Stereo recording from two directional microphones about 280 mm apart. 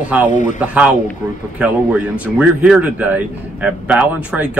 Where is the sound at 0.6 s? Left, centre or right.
Centre.